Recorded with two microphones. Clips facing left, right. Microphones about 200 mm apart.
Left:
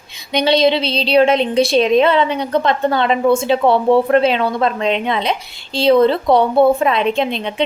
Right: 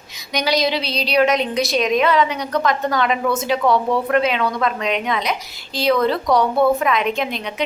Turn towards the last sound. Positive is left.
turn(degrees=30)  # may be behind; listen again after turning